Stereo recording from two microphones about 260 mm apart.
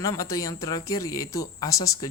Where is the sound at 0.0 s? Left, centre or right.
Centre.